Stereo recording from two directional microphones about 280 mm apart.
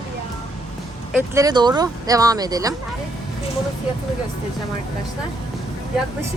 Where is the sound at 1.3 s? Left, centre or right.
Centre.